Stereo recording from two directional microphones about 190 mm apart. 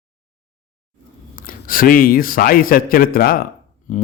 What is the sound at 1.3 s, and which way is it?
A man's voice, 50° left (ahead or behind).